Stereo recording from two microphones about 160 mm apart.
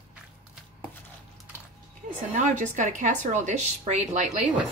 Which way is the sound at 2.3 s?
50° right (ahead or behind).